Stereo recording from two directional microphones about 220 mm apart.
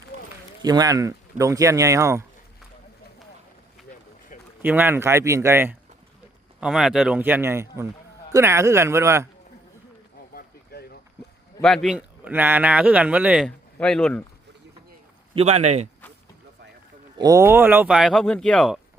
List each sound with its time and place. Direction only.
0.6 s speech: 15° right (ahead or behind)
4.6 s speech: 10° right (ahead or behind)
10.3 s boat: 45° left (ahead or behind)
11.6 s speech: centre (ahead or behind)
15.4 s speech: 30° right (ahead or behind)
17.2 s speech: 15° right (ahead or behind); by 18.8 s centre (ahead or behind)